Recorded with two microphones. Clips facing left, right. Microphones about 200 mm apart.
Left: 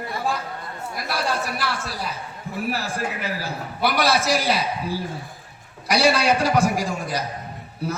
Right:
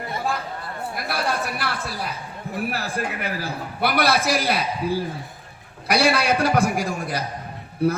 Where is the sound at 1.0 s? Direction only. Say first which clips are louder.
Even; 60° right (ahead or behind).